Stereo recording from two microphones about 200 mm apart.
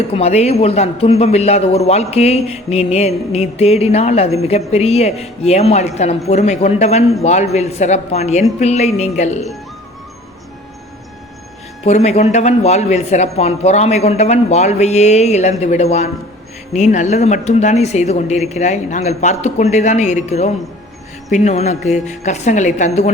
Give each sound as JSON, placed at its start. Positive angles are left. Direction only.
{"t": 0.1, "sound": "a man's voice", "side_deg": 30}
{"t": 11.9, "sound": "a man's voice", "side_deg": 35}